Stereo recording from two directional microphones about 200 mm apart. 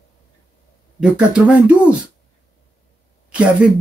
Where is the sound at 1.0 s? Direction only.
5° right (ahead or behind).